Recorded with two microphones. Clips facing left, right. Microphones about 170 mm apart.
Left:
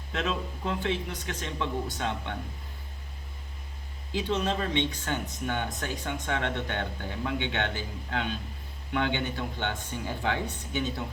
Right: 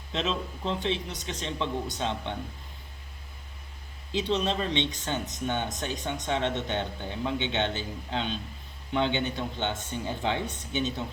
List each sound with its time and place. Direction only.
0.1 s speech: 25° right (ahead or behind)
4.3 s speech: 20° right (ahead or behind)